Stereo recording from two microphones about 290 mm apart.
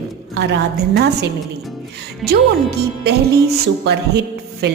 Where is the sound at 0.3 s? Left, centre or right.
Right.